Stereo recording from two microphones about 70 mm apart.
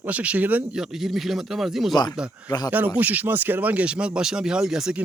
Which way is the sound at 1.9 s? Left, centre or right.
Left.